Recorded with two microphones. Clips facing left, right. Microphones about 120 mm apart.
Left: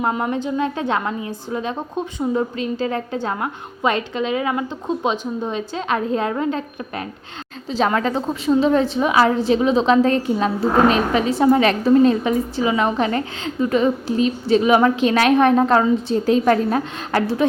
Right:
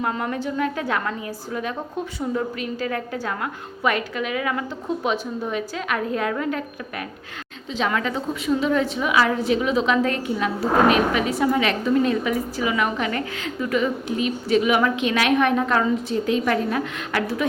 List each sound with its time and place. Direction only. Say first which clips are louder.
0.0 s a woman's voice: left 4 dB; 20° left (ahead or behind)